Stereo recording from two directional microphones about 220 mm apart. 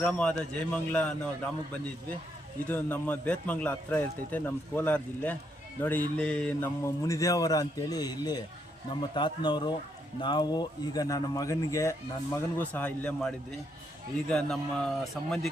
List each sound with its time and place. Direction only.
0.0 s a man's voice: 5° left (ahead or behind)
2.6 s a man's voice: 10° left (ahead or behind)